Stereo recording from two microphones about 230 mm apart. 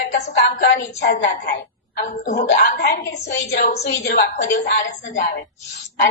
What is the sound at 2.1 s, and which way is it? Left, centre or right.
Speech, left.